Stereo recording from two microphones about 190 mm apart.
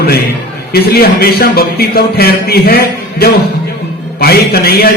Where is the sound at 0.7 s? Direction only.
55° left (ahead or behind).